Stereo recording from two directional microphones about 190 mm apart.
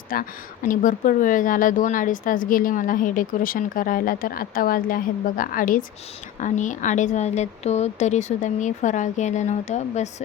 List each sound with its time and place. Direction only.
0.1 s a woman's voice: 45° left (ahead or behind)